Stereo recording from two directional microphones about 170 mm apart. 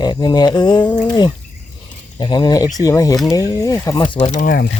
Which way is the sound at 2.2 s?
25° left (ahead or behind).